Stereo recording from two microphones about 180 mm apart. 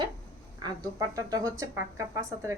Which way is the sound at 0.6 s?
20° right (ahead or behind).